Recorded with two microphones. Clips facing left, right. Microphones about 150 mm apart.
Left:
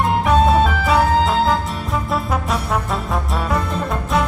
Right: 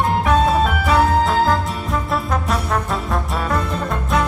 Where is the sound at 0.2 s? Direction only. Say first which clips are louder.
Left 3 dB; centre (ahead or behind).